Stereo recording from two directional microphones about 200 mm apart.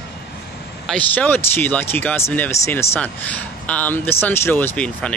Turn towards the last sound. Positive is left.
turn(degrees=5)  # may be behind; listen again after turning